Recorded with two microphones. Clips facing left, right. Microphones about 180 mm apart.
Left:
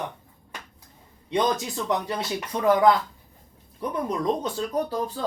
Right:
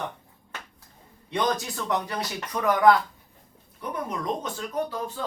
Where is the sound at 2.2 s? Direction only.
25° left (ahead or behind).